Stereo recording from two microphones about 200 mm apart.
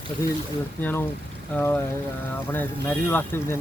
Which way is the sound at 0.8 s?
10° left (ahead or behind).